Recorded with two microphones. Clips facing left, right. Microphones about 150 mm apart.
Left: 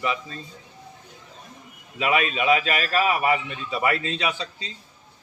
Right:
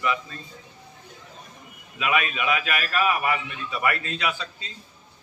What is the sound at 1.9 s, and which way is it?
A man's voice, 30° left (ahead or behind).